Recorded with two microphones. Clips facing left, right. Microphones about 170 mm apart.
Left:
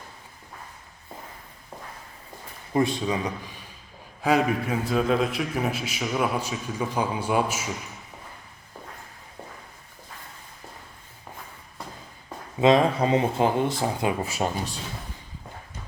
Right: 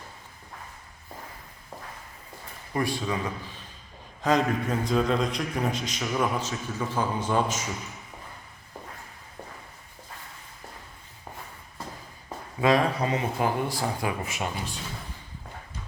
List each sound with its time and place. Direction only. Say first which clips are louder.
2.7 s a man's voice: left 4 dB; 20° left (ahead or behind)
12.5 s speech: left 4 dB; 25° left (ahead or behind)